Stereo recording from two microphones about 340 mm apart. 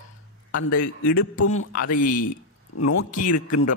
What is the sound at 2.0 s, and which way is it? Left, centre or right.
Speech, left.